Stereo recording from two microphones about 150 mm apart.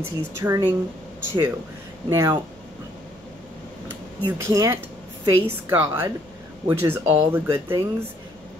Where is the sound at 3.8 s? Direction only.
15° right (ahead or behind).